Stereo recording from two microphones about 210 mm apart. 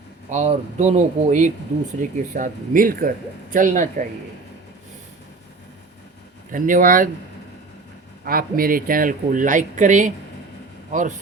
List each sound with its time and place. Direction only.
0.3 s speech: 35° right (ahead or behind)
6.5 s speech: 40° right (ahead or behind)
8.2 s speech: 45° right (ahead or behind)